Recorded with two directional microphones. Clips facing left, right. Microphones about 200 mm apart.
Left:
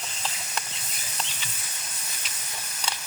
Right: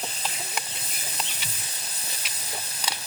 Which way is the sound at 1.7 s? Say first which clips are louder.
Right 2 dB; 35° right (ahead or behind).